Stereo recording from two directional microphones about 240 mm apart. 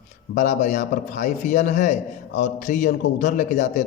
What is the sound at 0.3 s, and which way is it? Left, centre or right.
A man's voice, left.